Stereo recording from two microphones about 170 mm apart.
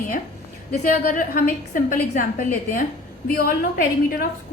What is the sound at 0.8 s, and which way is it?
A woman's voice, 50° left (ahead or behind).